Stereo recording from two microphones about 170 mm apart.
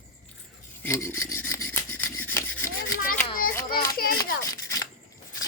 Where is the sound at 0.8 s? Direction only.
15° left (ahead or behind).